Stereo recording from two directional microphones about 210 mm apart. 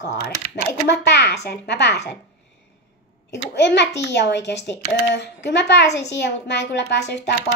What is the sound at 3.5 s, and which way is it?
Speech, 55° left (ahead or behind).